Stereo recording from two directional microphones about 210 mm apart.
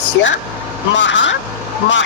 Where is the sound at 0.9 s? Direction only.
60° left (ahead or behind).